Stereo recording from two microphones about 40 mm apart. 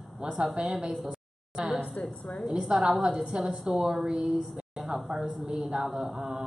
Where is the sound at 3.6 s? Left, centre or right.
Centre.